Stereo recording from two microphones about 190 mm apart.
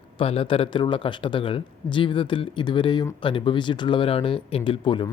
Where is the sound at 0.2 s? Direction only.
30° left (ahead or behind).